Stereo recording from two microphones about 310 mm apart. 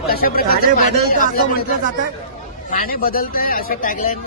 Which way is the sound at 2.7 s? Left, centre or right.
Left.